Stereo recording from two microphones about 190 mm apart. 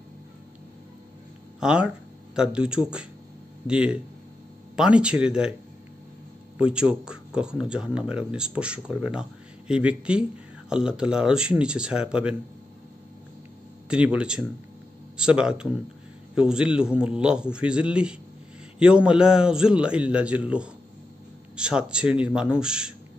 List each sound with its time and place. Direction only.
1.6 s speech: 5° right (ahead or behind)
6.6 s speech: 5° right (ahead or behind)
13.8 s speech: 5° right (ahead or behind)